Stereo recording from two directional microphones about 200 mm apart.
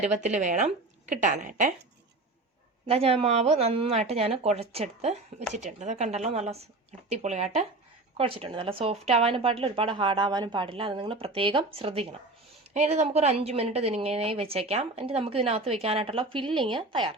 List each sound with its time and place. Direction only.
0.0 s speech: 35° right (ahead or behind)
2.8 s a woman's voice: 30° right (ahead or behind)